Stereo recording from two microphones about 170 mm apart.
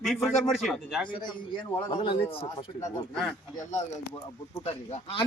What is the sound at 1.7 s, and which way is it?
Speech, 30° left (ahead or behind).